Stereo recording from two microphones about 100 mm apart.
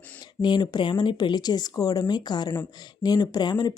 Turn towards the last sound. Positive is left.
turn(degrees=45)  # may be behind; listen again after turning